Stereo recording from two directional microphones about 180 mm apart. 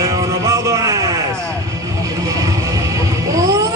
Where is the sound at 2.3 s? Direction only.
20° right (ahead or behind).